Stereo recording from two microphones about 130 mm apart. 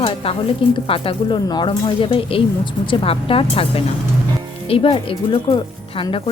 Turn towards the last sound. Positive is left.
turn(degrees=45)  # may be behind; listen again after turning